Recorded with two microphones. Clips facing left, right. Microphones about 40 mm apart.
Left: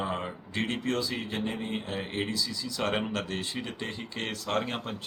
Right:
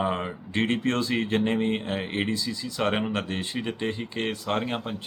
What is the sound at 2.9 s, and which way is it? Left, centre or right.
Speech, centre.